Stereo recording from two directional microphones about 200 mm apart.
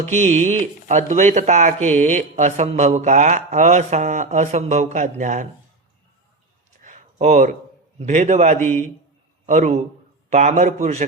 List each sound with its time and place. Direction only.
0.0 s speech: 35° right (ahead or behind)
6.8 s a sound: 35° right (ahead or behind)
7.9 s speech: 35° right (ahead or behind)
8.5 s a man's voice: 10° left (ahead or behind)
9.5 s speech: 35° right (ahead or behind)